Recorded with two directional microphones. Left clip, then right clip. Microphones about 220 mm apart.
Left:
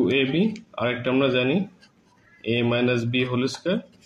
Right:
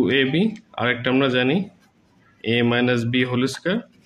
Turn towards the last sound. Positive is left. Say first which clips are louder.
# right 2 dB
turn(degrees=-45)  # may be behind; listen again after turning